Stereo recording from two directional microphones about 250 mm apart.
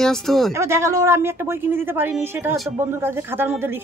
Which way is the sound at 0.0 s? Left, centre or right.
Centre.